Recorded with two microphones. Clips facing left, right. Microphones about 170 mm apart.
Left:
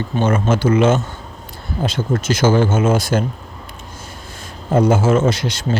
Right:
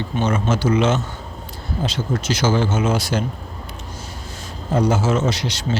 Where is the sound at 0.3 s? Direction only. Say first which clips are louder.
Left 3 dB; 50° left (ahead or behind).